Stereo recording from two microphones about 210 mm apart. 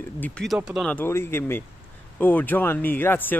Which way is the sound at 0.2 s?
5° left (ahead or behind).